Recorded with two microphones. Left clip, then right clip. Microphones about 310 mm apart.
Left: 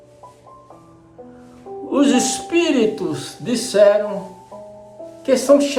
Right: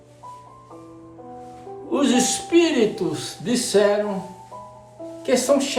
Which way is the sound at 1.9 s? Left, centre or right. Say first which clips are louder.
Left 3 dB; centre.